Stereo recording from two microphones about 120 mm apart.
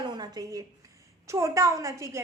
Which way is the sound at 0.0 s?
35° right (ahead or behind).